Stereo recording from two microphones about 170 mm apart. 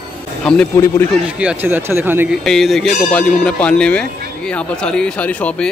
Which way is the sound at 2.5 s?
Centre (ahead or behind).